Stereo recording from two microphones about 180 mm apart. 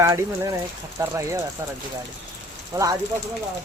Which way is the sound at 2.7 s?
20° right (ahead or behind).